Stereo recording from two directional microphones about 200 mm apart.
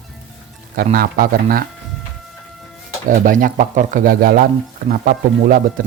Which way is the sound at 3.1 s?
40° right (ahead or behind).